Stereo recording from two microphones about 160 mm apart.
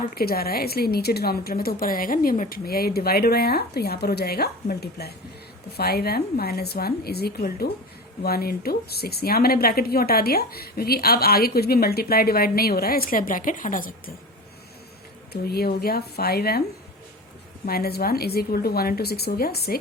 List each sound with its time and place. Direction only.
0.1 s a woman's voice: 70° left (ahead or behind)
15.3 s a woman's voice: 75° left (ahead or behind)
17.7 s a woman's voice: 75° left (ahead or behind)